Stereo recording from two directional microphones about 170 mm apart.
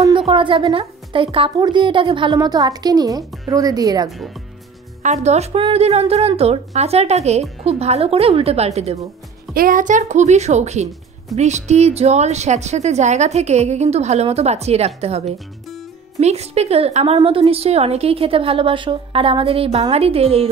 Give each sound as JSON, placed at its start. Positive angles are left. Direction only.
{"t": 0.3, "sound": "a woman's voice", "side_deg": -30}
{"t": 5.0, "sound": "a woman's voice", "side_deg": -40}
{"t": 9.5, "sound": "a woman's voice", "side_deg": -55}